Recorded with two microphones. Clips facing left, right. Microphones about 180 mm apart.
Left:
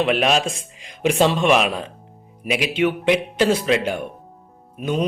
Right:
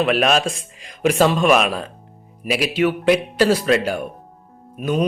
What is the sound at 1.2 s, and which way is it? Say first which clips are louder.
A man's voice: right 1 dB; 25° left (ahead or behind).